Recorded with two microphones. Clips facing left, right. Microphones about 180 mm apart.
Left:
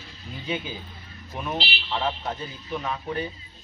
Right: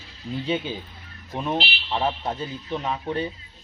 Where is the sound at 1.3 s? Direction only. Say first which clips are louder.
Right 4 dB; 30° right (ahead or behind).